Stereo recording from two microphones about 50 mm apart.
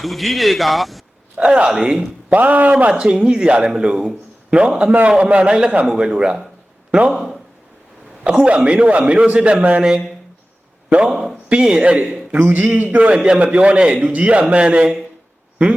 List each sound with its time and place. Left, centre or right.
0.0 s a man's voice: centre
1.4 s a man's voice: right
2.3 s a man's voice: right
2.9 s a man's voice: centre
3.9 s a man's voice: centre
4.5 s a man's voice: right
7.1 s a man's voice: centre
8.2 s a man's voice: right
10.8 s a man's voice: right
11.1 s a man's voice: centre
11.4 s a man's voice: centre
13.1 s speech: centre
13.4 s a man's voice: right